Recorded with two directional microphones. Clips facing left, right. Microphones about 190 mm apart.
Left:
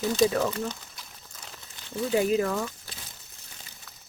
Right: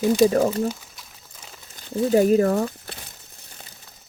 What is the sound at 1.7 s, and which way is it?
Speech, 40° right (ahead or behind).